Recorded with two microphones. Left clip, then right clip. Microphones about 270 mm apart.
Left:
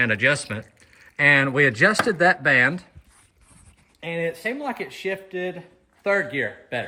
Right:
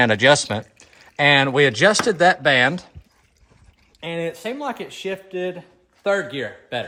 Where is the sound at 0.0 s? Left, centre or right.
Right.